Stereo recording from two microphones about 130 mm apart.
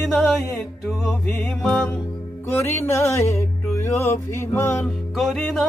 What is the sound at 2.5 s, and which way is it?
Music, 20° left (ahead or behind).